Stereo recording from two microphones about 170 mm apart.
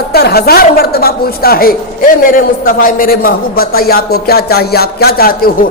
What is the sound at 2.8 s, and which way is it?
A man's voice, 55° left (ahead or behind).